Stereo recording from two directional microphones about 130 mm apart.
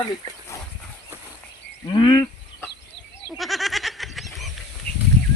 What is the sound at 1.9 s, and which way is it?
Speech, 35° left (ahead or behind).